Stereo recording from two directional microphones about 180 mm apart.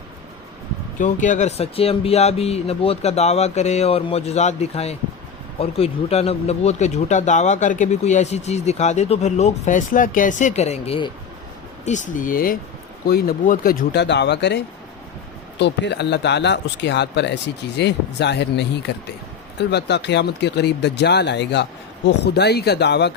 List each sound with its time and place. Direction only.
0.9 s speech: 45° left (ahead or behind)
11.9 s speech: 45° left (ahead or behind); by 23.1 s 70° left (ahead or behind)